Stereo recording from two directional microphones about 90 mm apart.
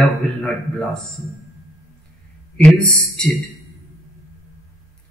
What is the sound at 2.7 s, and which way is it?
Speech, 5° left (ahead or behind).